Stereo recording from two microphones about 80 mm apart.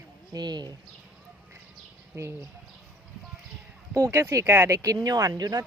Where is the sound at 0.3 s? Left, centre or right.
Right.